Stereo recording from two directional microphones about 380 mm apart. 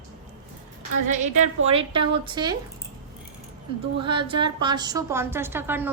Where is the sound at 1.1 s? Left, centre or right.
Centre.